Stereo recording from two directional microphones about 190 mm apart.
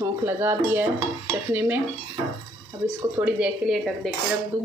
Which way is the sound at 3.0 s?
10° right (ahead or behind).